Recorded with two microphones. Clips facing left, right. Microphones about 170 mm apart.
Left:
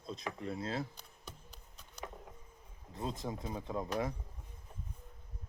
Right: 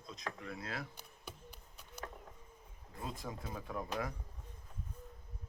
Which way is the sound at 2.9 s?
20° left (ahead or behind).